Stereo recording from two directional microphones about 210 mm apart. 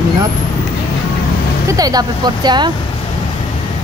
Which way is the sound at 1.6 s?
15° right (ahead or behind).